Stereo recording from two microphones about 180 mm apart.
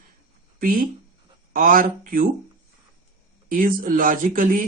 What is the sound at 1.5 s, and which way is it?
Speech, 50° right (ahead or behind).